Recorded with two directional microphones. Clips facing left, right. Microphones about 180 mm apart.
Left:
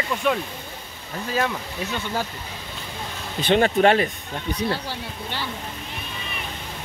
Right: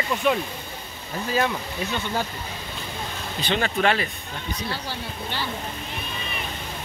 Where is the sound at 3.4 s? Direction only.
50° left (ahead or behind).